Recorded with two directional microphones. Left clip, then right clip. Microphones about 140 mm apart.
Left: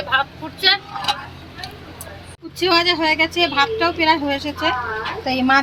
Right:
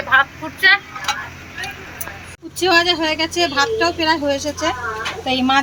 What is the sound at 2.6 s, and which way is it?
A woman's voice, 20° right (ahead or behind).